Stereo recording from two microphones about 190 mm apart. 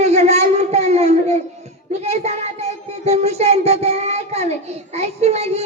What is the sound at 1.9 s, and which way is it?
Child singing, 35° right (ahead or behind).